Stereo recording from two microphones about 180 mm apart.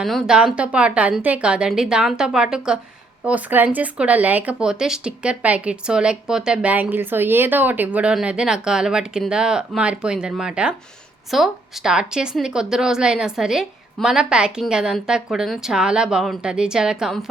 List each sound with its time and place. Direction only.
0.0 s a woman's voice: centre (ahead or behind)